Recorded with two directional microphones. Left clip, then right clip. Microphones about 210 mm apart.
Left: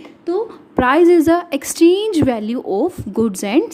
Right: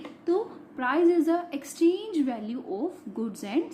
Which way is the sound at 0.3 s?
45° left (ahead or behind).